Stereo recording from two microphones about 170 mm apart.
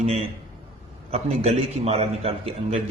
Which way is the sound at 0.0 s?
40° right (ahead or behind).